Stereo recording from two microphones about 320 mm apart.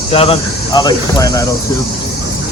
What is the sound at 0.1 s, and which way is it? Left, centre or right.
Speech, centre.